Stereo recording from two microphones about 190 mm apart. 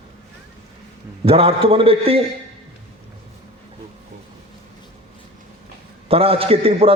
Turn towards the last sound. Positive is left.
turn(degrees=-30)  # may be behind; listen again after turning